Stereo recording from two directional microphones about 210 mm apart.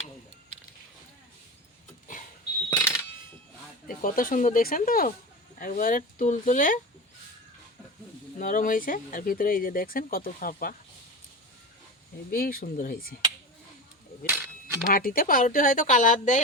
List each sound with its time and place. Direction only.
2.6 s coin: 10° left (ahead or behind)
3.8 s speech: 40° left (ahead or behind)
8.4 s speech: 40° left (ahead or behind)
12.3 s speech: 45° left (ahead or behind)
14.3 s a sound: 10° right (ahead or behind)
14.8 s speech: 45° left (ahead or behind)